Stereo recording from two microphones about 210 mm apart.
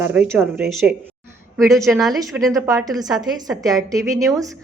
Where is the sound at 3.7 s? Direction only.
15° right (ahead or behind).